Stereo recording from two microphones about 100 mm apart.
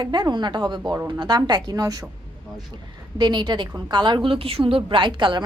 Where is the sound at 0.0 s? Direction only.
45° right (ahead or behind).